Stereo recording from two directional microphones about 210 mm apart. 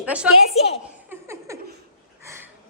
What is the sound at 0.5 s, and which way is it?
Speech, 30° left (ahead or behind).